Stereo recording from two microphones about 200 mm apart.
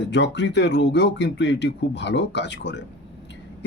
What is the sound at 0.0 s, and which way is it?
Speech, 60° left (ahead or behind).